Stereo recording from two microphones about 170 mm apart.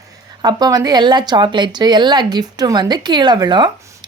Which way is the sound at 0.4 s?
20° right (ahead or behind).